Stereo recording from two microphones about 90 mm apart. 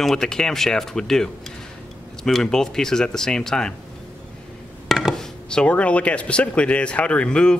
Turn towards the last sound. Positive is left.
turn(degrees=10)  # may be behind; listen again after turning